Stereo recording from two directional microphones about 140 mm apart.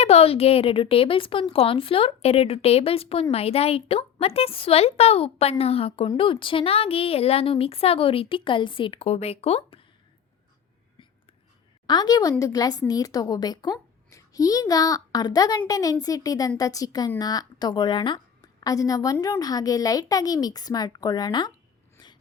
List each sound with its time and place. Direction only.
0.0 s a woman's voice: 45° left (ahead or behind)
11.9 s a woman's voice: 30° left (ahead or behind)